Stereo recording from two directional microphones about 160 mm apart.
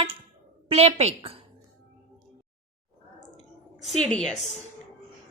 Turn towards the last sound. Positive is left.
turn(degrees=0)  # may be behind; listen again after turning